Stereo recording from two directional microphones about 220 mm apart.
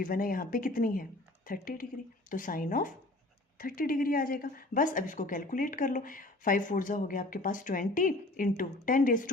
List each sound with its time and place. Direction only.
0.0 s speech: 40° left (ahead or behind)